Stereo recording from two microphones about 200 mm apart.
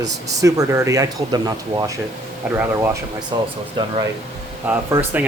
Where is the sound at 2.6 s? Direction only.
15° right (ahead or behind).